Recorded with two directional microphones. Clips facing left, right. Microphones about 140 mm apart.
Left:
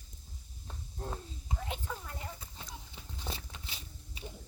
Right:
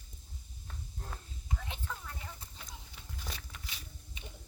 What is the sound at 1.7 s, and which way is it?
Whispering, 15° left (ahead or behind).